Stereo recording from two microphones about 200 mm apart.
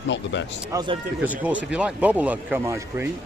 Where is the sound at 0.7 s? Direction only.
20° right (ahead or behind).